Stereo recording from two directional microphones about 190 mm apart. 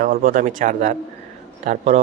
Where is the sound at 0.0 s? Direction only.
45° right (ahead or behind).